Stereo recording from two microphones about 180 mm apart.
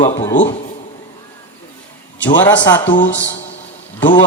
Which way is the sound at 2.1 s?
85° left.